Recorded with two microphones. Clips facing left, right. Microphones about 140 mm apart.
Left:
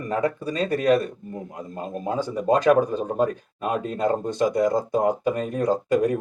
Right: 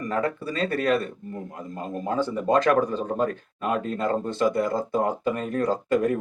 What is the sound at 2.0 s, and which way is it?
Speech, 15° left (ahead or behind).